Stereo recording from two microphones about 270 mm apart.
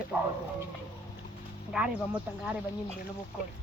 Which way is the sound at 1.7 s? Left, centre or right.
Centre.